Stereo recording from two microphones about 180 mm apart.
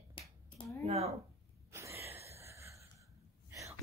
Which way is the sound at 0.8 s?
35° right (ahead or behind).